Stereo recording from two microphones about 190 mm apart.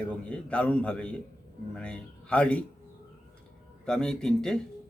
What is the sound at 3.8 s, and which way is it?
Speech, 5° left (ahead or behind).